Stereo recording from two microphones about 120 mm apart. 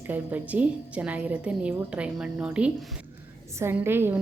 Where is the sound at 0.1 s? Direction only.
15° right (ahead or behind).